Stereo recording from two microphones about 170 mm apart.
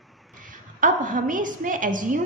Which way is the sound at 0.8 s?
50° right (ahead or behind).